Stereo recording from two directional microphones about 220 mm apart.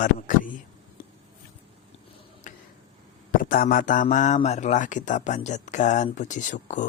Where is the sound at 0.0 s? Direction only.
35° left (ahead or behind).